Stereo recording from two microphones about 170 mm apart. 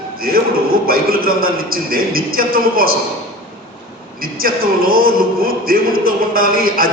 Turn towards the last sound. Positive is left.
turn(degrees=-60)  # may be behind; listen again after turning